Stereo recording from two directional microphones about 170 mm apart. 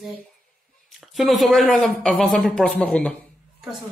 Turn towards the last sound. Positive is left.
turn(degrees=5)  # may be behind; listen again after turning